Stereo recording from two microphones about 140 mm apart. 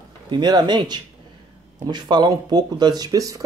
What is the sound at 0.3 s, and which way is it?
Speech, 30° right (ahead or behind).